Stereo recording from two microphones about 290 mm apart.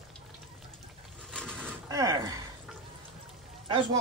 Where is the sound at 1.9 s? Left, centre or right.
Centre.